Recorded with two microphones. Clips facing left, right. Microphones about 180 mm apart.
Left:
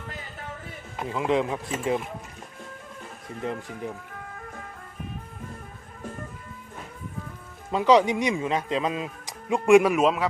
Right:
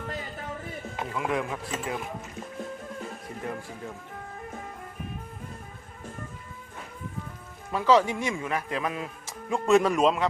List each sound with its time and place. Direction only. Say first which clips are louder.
1.1 s speech: left 6 dB; 20° left (ahead or behind)
3.4 s speech: left 5 dB; 20° left (ahead or behind)
7.7 s speech: left 3 dB; 20° left (ahead or behind)